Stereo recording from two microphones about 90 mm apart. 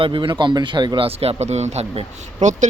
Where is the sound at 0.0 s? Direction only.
65° right (ahead or behind).